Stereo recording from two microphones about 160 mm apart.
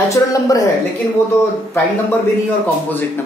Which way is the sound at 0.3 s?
20° left (ahead or behind).